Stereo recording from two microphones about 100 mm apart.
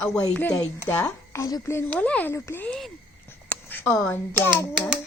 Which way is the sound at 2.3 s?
30° left (ahead or behind).